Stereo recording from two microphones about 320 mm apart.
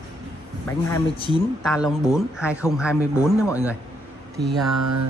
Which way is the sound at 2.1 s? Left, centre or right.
Centre.